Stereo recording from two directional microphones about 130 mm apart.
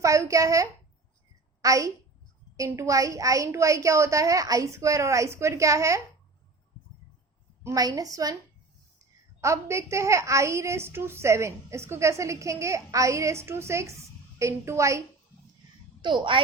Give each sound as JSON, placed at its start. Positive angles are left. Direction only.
{"t": 0.0, "sound": "a woman's voice", "side_deg": -25}
{"t": 7.6, "sound": "a woman's voice", "side_deg": -25}
{"t": 9.4, "sound": "a woman's voice", "side_deg": -20}
{"t": 16.0, "sound": "a child's voice", "side_deg": -35}